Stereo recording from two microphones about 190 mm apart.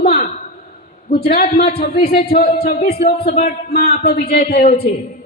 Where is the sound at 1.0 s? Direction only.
55° left (ahead or behind).